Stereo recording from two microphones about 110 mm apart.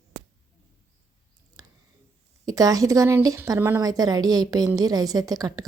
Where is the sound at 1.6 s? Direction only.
35° right (ahead or behind).